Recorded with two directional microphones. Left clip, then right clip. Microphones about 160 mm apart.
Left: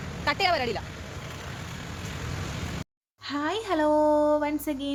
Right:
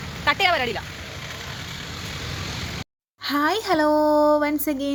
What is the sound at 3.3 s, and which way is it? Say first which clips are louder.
Speech: right 7 dB; 35° right (ahead or behind).